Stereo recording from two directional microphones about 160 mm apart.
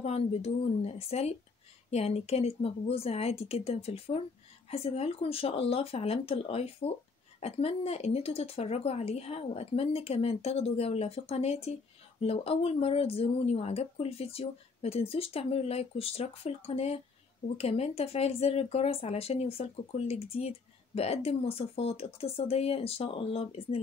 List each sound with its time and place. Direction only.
0.0 s speech: 40° left (ahead or behind)